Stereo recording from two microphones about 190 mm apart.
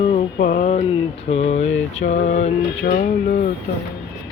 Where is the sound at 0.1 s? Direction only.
45° left (ahead or behind).